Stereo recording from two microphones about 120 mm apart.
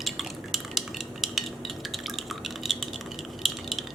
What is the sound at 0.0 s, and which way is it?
Cutlery, centre (ahead or behind).